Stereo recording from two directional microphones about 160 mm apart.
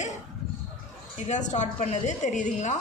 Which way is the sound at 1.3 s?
50° left (ahead or behind).